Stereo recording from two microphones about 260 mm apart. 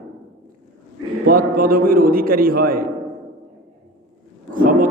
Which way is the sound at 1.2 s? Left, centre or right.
Right.